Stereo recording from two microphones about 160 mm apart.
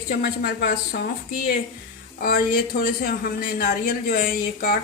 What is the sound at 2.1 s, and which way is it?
A woman's voice, 65° left (ahead or behind).